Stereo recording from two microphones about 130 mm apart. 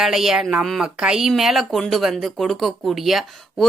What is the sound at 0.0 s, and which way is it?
Speech, 5° right (ahead or behind).